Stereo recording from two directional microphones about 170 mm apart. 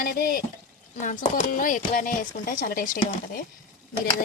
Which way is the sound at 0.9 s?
45° left (ahead or behind).